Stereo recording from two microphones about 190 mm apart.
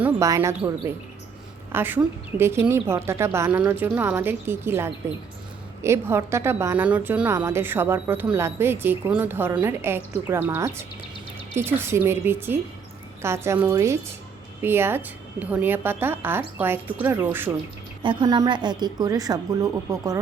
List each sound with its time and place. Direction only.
0.0 s a woman's voice: 15° right (ahead or behind)
18.0 s a woman's voice: 25° right (ahead or behind)